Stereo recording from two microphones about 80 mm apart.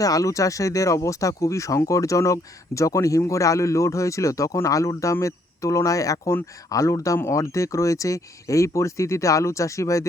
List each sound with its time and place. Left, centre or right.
0.0 s speech: left